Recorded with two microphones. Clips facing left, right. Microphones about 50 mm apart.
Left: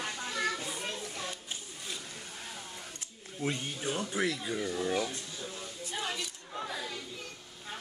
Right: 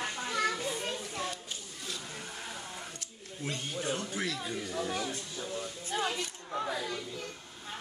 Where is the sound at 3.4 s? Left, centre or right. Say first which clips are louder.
Left 1 dB; centre.